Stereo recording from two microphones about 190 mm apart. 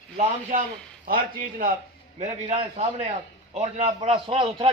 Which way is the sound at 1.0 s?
45° right (ahead or behind).